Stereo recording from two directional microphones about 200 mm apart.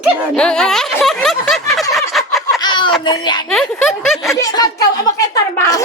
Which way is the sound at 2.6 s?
20° left (ahead or behind).